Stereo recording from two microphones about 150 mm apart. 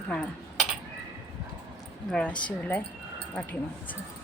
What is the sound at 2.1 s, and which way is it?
Speech, 5° left (ahead or behind).